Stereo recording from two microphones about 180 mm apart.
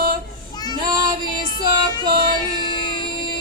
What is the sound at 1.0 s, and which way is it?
Music, 25° right (ahead or behind).